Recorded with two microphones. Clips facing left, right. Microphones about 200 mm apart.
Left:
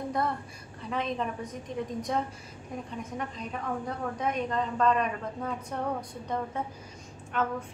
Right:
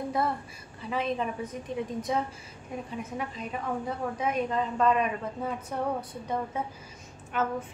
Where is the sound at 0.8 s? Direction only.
5° right (ahead or behind).